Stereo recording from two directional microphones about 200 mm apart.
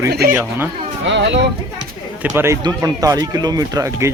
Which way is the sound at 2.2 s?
10° right (ahead or behind).